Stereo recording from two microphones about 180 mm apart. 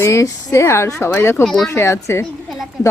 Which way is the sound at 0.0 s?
15° left (ahead or behind).